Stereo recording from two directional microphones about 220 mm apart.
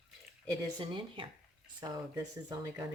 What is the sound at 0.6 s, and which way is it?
Speech, 20° right (ahead or behind).